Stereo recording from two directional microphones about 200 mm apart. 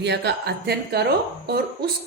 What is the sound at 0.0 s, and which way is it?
Speech, 55° right (ahead or behind).